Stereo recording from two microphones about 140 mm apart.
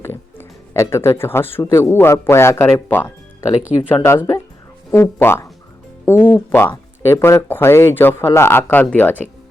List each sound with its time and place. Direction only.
0.0 s speech: 15° left (ahead or behind)